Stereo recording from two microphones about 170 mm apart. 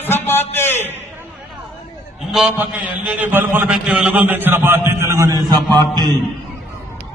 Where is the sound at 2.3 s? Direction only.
5° right (ahead or behind); by 6.1 s 25° right (ahead or behind).